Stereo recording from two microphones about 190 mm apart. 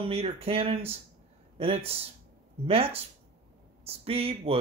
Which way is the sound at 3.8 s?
30° right (ahead or behind).